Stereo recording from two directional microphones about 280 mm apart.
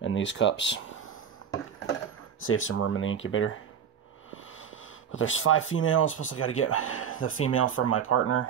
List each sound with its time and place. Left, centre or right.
0.0 s speech: left
2.4 s speech: left
5.1 s speech: left